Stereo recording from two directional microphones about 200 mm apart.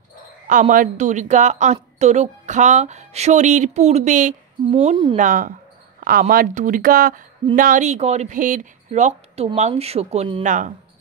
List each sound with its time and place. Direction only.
0.5 s a woman's voice: 40° right (ahead or behind)
5.1 s a woman's voice: 40° right (ahead or behind)